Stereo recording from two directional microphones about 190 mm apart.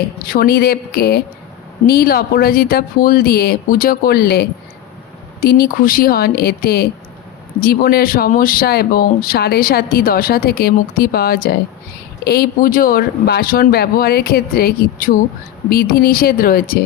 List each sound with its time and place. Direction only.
0.3 s speech: 50° left (ahead or behind)